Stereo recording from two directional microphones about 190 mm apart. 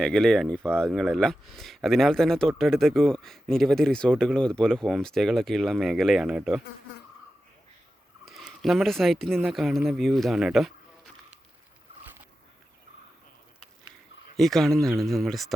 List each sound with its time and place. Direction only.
0.0 s speech: 5° left (ahead or behind)
8.2 s speech: centre (ahead or behind)
14.3 s speech: centre (ahead or behind)